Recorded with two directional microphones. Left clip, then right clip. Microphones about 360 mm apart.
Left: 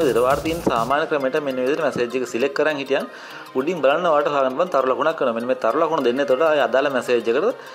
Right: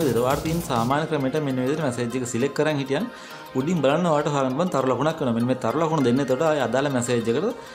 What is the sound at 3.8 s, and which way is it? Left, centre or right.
Speech, centre.